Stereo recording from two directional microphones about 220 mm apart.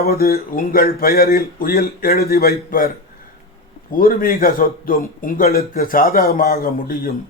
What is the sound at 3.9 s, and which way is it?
A man's voice, 40° left (ahead or behind).